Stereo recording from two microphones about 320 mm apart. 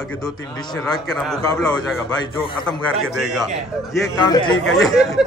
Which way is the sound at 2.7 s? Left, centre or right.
Centre.